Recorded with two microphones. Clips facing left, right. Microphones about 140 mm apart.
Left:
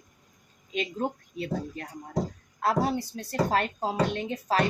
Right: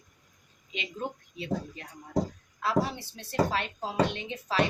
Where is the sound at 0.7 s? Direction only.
45° left (ahead or behind).